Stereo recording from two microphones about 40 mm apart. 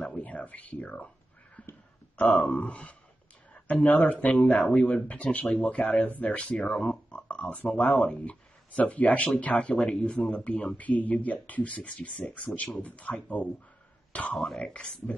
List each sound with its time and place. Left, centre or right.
0.2 s speech: left
1.6 s a sound: left
2.1 s speech: left
6.6 s speech: left
10.8 s speech: left
14.3 s speech: centre
14.6 s speech: left